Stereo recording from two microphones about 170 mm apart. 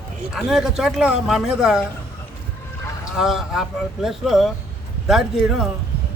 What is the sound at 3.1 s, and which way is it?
A man's voice, centre (ahead or behind).